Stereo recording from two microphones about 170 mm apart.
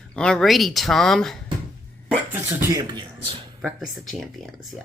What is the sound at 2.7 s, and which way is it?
Speech, 25° right (ahead or behind).